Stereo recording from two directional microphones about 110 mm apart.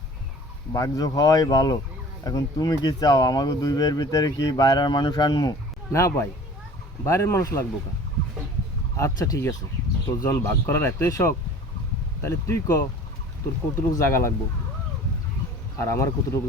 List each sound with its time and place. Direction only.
0.7 s speech: 35° left (ahead or behind)
9.0 s speech: 30° left (ahead or behind)
14.1 s speech: 25° left (ahead or behind)
15.8 s speech: 25° left (ahead or behind)